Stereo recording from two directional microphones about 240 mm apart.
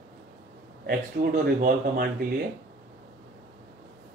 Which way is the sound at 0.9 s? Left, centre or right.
Right.